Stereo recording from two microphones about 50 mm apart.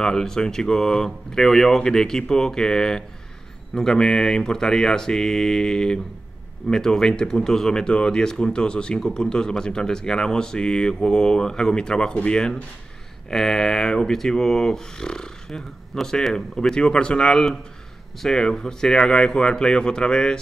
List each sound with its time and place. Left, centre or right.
0.0 s speech: centre